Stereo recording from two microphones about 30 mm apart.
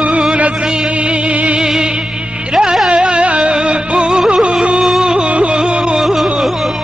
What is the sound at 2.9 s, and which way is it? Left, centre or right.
Music, right.